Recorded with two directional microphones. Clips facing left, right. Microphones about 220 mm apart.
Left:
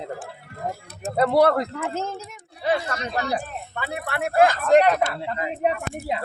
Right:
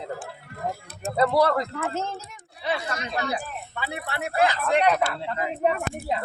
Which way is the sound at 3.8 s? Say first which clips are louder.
Left 4 dB; 55° left (ahead or behind).